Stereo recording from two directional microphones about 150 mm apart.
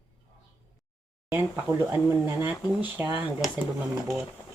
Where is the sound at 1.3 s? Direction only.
15° right (ahead or behind).